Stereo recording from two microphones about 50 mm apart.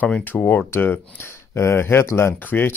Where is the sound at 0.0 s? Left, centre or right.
Left.